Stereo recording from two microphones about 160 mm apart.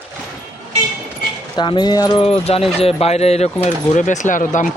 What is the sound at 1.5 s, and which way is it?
Speech, 30° left (ahead or behind).